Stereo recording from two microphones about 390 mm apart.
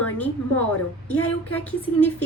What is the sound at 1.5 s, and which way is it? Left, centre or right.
Speech, centre.